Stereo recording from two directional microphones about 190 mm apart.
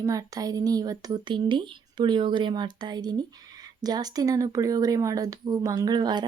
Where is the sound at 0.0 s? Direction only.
20° right (ahead or behind).